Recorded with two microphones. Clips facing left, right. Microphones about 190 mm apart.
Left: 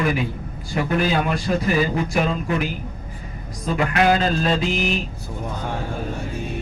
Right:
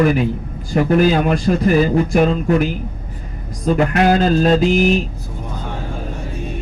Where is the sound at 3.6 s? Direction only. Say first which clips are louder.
Right 4 dB; 40° right (ahead or behind).